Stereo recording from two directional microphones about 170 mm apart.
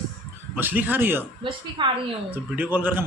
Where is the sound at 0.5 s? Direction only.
10° right (ahead or behind).